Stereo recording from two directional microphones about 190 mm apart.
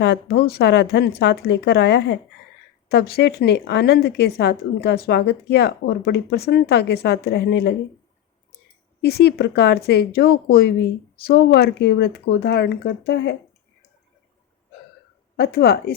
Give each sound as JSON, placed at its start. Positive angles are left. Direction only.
{"t": 0.0, "sound": "a woman's voice", "side_deg": 60}
{"t": 9.0, "sound": "a woman's voice", "side_deg": 60}
{"t": 15.4, "sound": "a woman's voice", "side_deg": 55}